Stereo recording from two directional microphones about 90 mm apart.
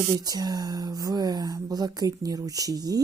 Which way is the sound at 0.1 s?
50° right (ahead or behind).